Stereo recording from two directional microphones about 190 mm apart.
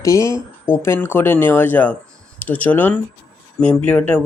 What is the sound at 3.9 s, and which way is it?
Speech, 10° left (ahead or behind).